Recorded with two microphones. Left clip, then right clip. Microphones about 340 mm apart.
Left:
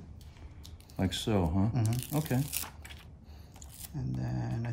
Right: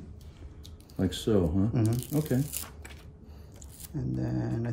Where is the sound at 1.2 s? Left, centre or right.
Left.